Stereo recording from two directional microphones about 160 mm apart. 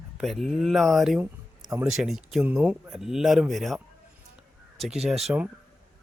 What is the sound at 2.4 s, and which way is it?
Speech, 10° right (ahead or behind).